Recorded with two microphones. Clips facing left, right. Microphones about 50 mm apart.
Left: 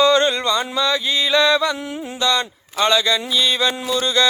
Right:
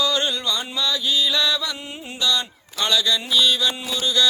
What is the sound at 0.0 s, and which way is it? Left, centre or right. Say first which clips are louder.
Music: left 7 dB; left.